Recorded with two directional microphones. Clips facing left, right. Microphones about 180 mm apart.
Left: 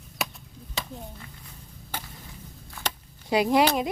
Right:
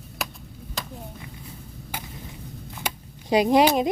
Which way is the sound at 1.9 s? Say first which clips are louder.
Right 1 dB; 10° right (ahead or behind).